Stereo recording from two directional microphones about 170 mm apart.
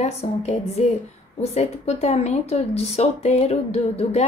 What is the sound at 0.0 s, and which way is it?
A woman's voice, 40° left (ahead or behind).